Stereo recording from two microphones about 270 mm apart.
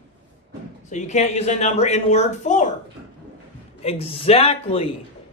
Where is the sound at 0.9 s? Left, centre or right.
Left.